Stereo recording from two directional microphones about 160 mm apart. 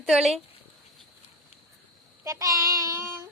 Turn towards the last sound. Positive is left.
turn(degrees=-15)  # may be behind; listen again after turning